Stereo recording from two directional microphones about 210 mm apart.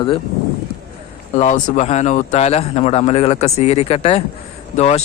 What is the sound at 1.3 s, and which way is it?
A man's voice, 35° left (ahead or behind).